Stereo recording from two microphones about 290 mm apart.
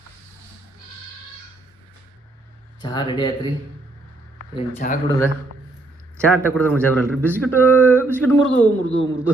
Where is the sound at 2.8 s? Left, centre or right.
Centre.